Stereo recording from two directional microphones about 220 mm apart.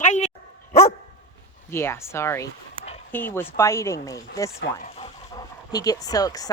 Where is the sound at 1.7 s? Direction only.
10° left (ahead or behind).